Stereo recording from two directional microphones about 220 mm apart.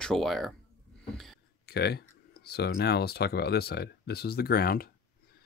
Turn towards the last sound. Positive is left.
turn(degrees=40)  # may be behind; listen again after turning